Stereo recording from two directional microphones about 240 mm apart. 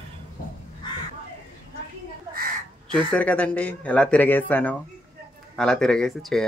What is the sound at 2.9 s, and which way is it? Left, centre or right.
Speech, centre.